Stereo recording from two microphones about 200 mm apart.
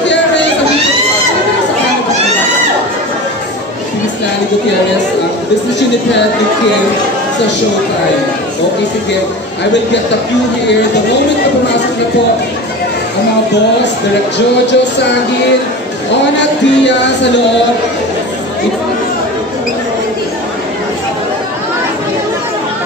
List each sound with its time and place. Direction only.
16.3 s speech: 60° left (ahead or behind)